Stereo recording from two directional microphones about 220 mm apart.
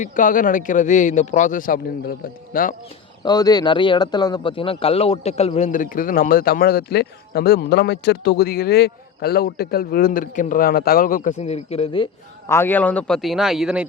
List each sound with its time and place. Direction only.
0.0 s a man's voice: 35° left (ahead or behind)
3.2 s a man's voice: 20° left (ahead or behind)
12.5 s speech: 10° left (ahead or behind)